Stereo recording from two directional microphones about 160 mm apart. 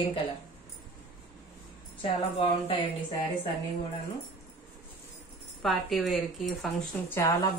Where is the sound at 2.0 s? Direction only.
35° left (ahead or behind).